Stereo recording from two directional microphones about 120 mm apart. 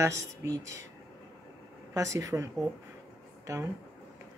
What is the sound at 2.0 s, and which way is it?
Speech, 25° right (ahead or behind).